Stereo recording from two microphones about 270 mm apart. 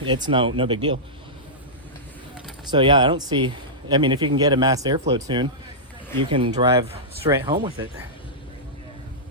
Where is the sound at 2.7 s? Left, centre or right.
Centre.